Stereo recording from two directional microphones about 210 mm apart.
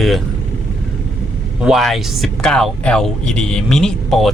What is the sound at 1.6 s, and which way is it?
Speech, centre (ahead or behind).